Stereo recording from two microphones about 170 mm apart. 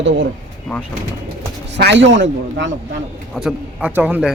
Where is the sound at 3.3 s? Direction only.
5° right (ahead or behind).